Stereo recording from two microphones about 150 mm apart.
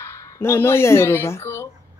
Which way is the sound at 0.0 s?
15° left (ahead or behind).